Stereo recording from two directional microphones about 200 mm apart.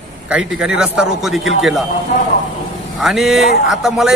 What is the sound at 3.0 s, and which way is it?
A man's voice, centre (ahead or behind).